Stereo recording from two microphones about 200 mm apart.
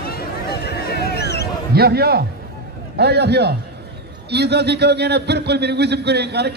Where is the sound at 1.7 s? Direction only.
50° right (ahead or behind).